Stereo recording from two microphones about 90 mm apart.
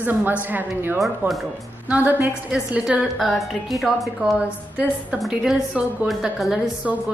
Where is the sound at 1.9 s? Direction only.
20° right (ahead or behind).